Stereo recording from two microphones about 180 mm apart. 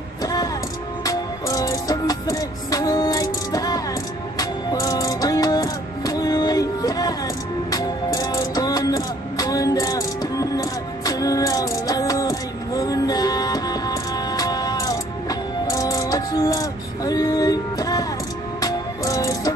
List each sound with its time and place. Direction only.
0.2 s music: 20° left (ahead or behind)